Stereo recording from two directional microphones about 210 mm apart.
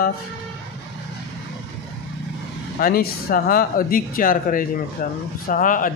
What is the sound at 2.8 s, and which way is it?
Speech, 45° left (ahead or behind).